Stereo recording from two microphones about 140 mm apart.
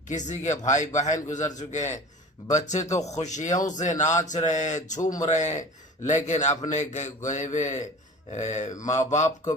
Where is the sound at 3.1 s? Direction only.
55° left (ahead or behind).